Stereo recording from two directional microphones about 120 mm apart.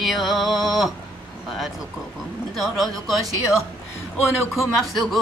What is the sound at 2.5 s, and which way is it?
Music, centre (ahead or behind).